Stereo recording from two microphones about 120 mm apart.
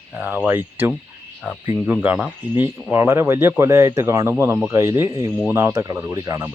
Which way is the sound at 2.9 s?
20° right (ahead or behind).